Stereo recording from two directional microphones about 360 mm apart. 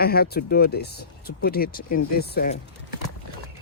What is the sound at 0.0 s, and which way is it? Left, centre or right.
Speech, left.